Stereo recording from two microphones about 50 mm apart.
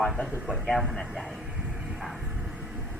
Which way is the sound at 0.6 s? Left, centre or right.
Centre.